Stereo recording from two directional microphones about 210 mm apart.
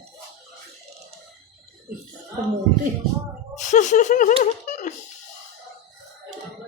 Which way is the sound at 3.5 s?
35° left (ahead or behind).